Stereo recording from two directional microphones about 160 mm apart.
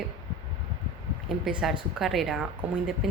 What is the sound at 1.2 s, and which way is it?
Speech, centre (ahead or behind).